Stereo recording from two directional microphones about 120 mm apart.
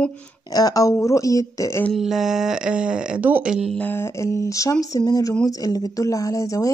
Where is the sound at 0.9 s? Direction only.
25° left (ahead or behind).